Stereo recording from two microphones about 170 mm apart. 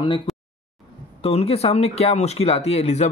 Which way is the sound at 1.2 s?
35° left (ahead or behind).